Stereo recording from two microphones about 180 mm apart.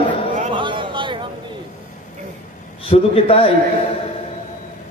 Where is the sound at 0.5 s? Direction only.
25° right (ahead or behind).